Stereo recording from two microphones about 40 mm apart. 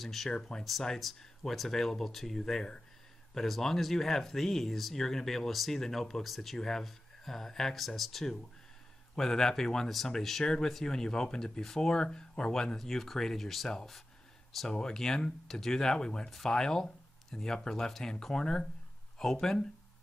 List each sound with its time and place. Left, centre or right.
0.0 s speech: centre
0.9 s speech: centre